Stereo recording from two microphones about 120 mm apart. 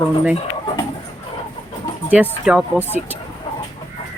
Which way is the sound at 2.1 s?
10° right (ahead or behind).